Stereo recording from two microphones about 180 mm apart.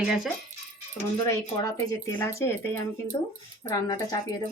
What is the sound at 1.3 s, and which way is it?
A woman's voice, 15° left (ahead or behind).